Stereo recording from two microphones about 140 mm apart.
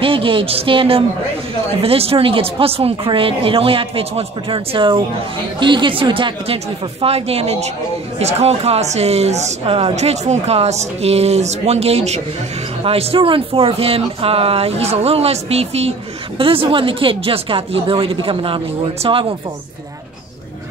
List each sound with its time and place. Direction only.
0.0 s speech: 40° right (ahead or behind)